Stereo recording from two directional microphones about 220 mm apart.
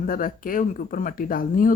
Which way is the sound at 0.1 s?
40° left (ahead or behind).